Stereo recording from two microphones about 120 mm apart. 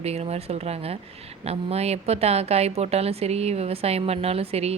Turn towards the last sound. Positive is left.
turn(degrees=-55)  # may be behind; listen again after turning